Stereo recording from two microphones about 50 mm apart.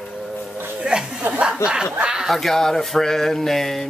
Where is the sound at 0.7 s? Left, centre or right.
Centre.